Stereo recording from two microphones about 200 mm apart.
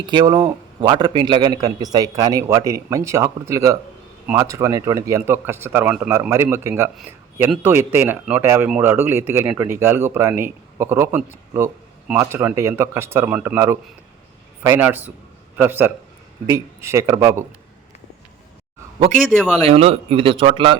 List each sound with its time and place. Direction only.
0.0 s a man's voice: 20° right (ahead or behind)
19.3 s speech: centre (ahead or behind)
19.6 s a man's voice: 30° right (ahead or behind)